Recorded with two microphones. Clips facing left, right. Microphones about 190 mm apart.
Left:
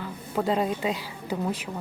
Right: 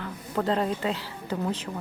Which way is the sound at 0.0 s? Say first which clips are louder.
Left 1 dB; 10° left (ahead or behind).